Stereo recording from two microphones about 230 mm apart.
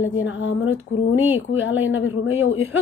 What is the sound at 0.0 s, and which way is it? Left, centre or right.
Speech, left.